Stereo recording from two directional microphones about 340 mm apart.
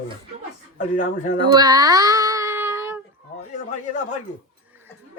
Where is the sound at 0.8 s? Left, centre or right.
Left.